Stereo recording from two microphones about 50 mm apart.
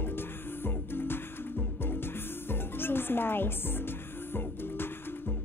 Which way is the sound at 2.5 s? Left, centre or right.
Left.